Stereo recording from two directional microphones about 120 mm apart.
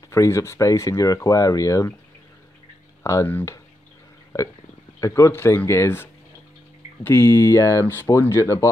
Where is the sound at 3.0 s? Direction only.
25° left (ahead or behind).